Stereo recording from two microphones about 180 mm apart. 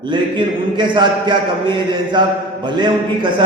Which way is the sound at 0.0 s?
25° right (ahead or behind).